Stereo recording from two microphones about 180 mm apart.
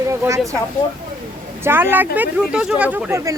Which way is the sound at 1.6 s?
10° right (ahead or behind).